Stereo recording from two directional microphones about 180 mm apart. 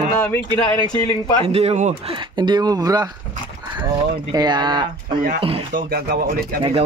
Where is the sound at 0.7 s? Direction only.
25° left (ahead or behind).